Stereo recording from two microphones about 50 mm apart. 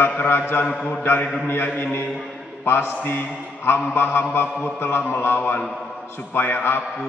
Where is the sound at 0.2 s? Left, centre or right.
Left.